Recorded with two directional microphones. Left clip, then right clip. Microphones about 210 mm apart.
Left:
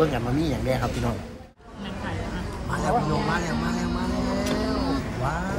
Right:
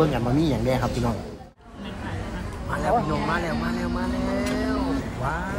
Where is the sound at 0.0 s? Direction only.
10° right (ahead or behind).